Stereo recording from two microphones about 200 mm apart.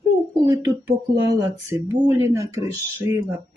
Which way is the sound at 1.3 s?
15° right (ahead or behind).